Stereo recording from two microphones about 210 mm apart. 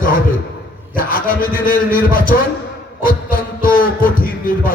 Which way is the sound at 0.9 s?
40° left (ahead or behind).